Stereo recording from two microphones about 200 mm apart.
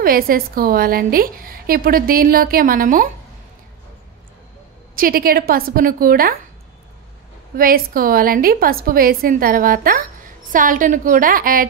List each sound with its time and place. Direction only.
0.0 s a woman's voice: 45° right (ahead or behind)
4.9 s a woman's voice: 45° right (ahead or behind)
7.5 s a woman's voice: 45° right (ahead or behind)